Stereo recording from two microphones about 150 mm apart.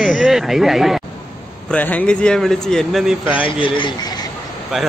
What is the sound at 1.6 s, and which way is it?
Speech, 10° left (ahead or behind).